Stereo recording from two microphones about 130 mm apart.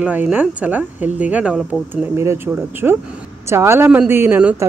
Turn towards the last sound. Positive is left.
turn(degrees=-15)  # may be behind; listen again after turning